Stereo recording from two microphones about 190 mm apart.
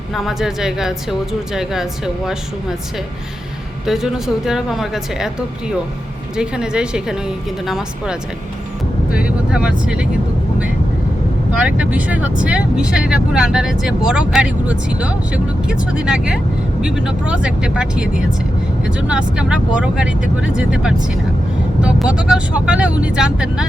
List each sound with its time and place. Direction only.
0.1 s speech: centre (ahead or behind)
3.8 s speech: centre (ahead or behind)
9.1 s vehicle: 5° right (ahead or behind)
9.8 s speech: 5° right (ahead or behind)
11.5 s speech: 5° right (ahead or behind)